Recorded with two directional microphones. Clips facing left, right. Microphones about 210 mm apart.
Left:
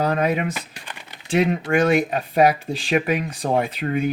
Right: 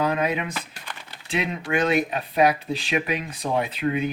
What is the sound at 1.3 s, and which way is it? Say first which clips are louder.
Speech: left 6 dB; 45° left (ahead or behind).